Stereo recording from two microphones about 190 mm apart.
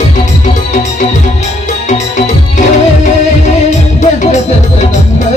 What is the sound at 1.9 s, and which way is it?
Music, 40° left (ahead or behind).